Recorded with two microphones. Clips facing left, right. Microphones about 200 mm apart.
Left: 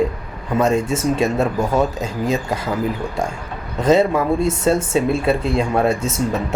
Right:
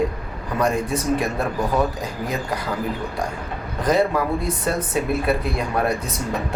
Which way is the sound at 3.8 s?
25° left (ahead or behind).